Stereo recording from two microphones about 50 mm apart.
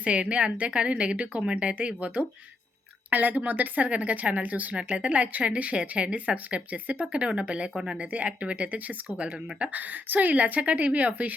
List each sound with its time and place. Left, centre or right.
0.0 s a woman's voice: right